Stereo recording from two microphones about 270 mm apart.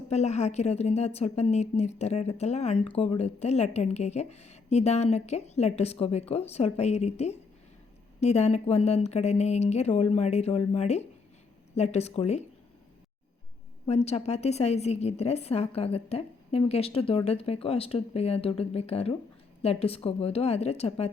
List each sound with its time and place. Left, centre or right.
0.1 s a woman's voice: left
13.8 s a woman's voice: left